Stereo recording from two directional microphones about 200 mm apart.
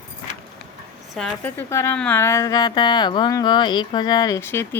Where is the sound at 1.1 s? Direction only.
5° left (ahead or behind).